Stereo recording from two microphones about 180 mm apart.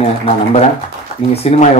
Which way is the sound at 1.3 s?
35° left (ahead or behind).